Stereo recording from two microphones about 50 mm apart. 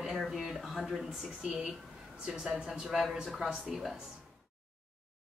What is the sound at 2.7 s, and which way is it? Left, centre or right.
Speech, centre.